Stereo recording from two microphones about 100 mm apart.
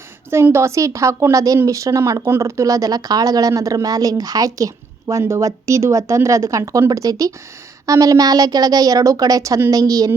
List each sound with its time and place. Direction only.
0.3 s a woman's voice: 25° right (ahead or behind)